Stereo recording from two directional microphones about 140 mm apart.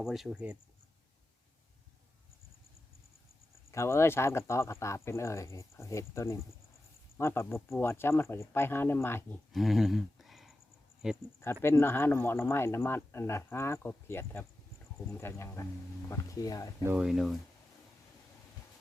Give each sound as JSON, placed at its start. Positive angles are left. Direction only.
{"t": 0.0, "sound": "speech", "side_deg": -5}
{"t": 3.7, "sound": "speech", "side_deg": 20}
{"t": 9.5, "sound": "a sound", "side_deg": 0}
{"t": 11.0, "sound": "speech", "side_deg": -5}
{"t": 11.6, "sound": "speech", "side_deg": 15}
{"t": 16.8, "sound": "speech", "side_deg": -15}
{"t": 17.1, "sound": "speech", "side_deg": 0}